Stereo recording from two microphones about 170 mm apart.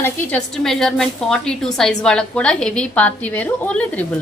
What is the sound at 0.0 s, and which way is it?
A woman's voice, 10° left (ahead or behind).